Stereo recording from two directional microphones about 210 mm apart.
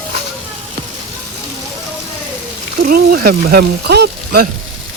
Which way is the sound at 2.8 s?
45° right (ahead or behind).